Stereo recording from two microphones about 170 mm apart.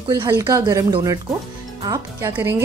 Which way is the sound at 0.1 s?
20° right (ahead or behind).